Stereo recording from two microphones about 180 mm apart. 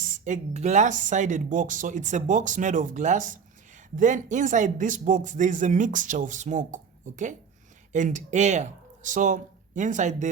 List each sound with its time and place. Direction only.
0.0 s speech: 45° right (ahead or behind)